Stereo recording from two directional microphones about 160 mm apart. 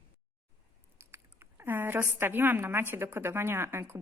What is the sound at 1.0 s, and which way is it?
Speech, 15° right (ahead or behind).